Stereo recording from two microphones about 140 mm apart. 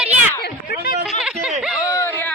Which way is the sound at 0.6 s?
90° left.